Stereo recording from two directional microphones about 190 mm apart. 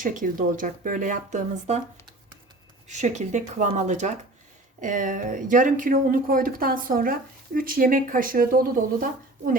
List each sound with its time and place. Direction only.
0.0 s speech: 45° right (ahead or behind)
2.9 s speech: 40° right (ahead or behind)